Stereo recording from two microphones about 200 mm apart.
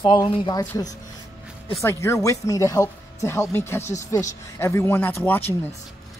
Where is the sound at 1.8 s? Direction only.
15° left (ahead or behind).